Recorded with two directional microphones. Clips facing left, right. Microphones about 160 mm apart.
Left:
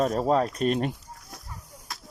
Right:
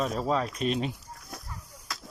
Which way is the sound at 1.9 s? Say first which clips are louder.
Right 1 dB; 90° right.